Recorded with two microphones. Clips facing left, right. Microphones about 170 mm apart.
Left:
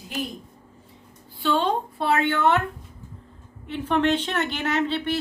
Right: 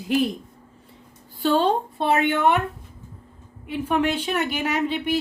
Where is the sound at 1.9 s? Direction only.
20° right (ahead or behind).